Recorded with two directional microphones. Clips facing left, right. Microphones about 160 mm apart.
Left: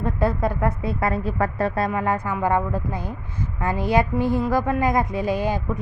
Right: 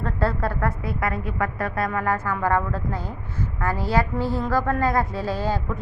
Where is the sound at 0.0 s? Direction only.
15° left (ahead or behind).